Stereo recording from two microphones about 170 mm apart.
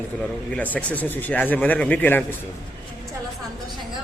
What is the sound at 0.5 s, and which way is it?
Speech, 10° left (ahead or behind).